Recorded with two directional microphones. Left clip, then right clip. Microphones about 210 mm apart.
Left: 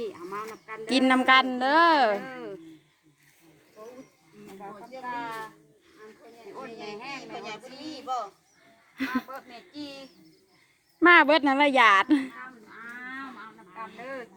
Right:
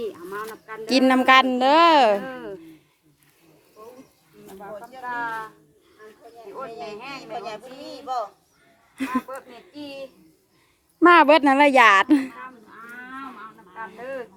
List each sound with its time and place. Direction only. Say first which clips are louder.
0.0 s a sound: right 4 dB; 15° right (ahead or behind)
0.5 s a woman's voice: right 5 dB; 15° right (ahead or behind)
6.9 s speech: right 2 dB; 10° right (ahead or behind)
7.2 s speech: right 5 dB; 30° right (ahead or behind)
9.0 s speech: right 4 dB; 15° right (ahead or behind)
11.0 s a woman's voice: right 4 dB; 25° right (ahead or behind)
13.7 s speech: right 5 dB; 5° right (ahead or behind)